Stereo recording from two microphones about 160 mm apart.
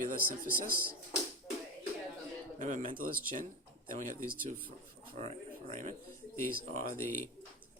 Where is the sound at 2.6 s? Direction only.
55° right (ahead or behind).